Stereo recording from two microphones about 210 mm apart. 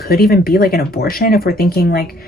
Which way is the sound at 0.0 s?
45° left (ahead or behind).